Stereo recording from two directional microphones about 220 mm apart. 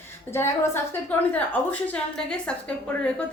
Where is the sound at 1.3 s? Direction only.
5° left (ahead or behind).